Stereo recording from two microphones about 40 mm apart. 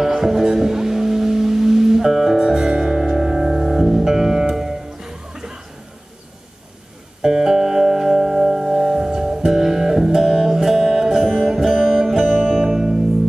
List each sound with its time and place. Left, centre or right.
0.0 s music: centre
7.2 s music: centre